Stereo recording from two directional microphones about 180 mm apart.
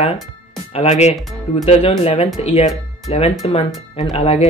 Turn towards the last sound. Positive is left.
turn(degrees=35)  # may be behind; listen again after turning